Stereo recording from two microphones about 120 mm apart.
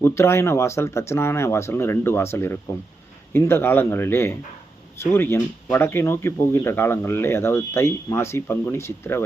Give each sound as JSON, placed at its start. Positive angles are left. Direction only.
{"t": 0.0, "sound": "speech", "side_deg": 20}